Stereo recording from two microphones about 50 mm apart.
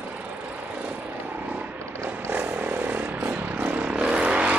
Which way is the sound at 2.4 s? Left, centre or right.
Right.